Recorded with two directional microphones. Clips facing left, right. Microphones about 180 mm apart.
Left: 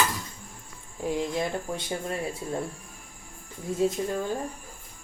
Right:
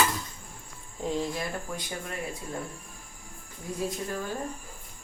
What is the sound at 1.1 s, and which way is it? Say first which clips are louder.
Speech: left 4 dB; 20° left (ahead or behind).